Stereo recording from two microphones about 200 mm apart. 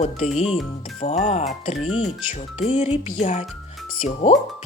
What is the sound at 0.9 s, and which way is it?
Speech, 35° left (ahead or behind).